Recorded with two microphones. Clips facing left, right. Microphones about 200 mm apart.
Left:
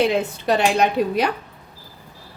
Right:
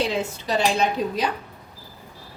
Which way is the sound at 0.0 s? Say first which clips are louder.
Left 5 dB; 60° left (ahead or behind).